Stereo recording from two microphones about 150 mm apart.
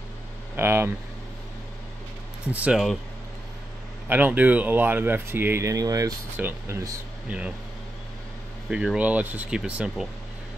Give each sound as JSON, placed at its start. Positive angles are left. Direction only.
{"t": 0.6, "sound": "speech", "side_deg": -15}
{"t": 2.5, "sound": "speech", "side_deg": -5}
{"t": 4.1, "sound": "speech", "side_deg": -10}
{"t": 7.2, "sound": "speech", "side_deg": -10}
{"t": 8.6, "sound": "speech", "side_deg": -5}